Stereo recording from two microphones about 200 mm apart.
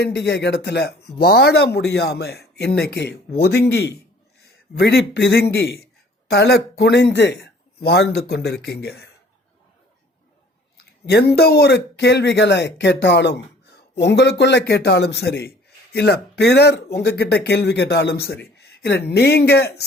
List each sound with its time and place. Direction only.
0.0 s a man's voice: 60° left (ahead or behind)
11.0 s a man's voice: 55° left (ahead or behind)